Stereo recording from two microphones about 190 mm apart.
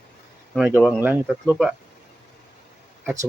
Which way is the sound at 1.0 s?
10° right (ahead or behind).